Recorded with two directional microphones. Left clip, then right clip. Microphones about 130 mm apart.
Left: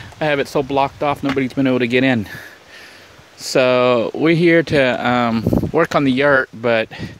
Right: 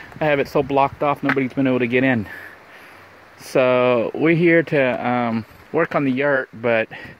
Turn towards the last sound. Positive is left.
turn(degrees=30)  # may be behind; listen again after turning